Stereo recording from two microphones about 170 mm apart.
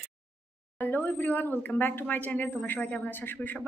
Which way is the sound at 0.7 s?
10° left (ahead or behind).